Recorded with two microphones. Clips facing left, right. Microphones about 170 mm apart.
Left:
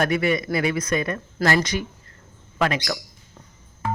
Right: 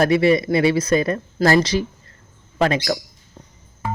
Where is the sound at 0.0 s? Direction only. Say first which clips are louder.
Right 6 dB; 30° right (ahead or behind).